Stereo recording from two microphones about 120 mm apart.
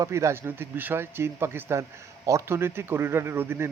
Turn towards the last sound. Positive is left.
turn(degrees=-20)  # may be behind; listen again after turning